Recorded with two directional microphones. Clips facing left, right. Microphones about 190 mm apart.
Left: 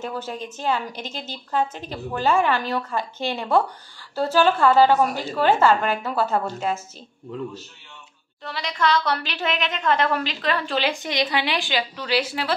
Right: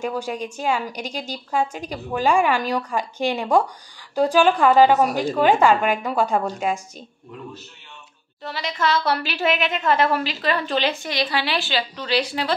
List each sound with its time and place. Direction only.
0.0 s a woman's voice: 15° right (ahead or behind)
8.5 s a woman's voice: centre (ahead or behind)
10.9 s a woman's voice: 20° left (ahead or behind)